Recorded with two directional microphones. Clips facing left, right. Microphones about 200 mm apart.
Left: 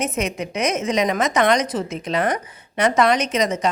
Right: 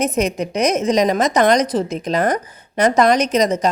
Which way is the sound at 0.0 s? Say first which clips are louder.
Right 5 dB; 35° right (ahead or behind).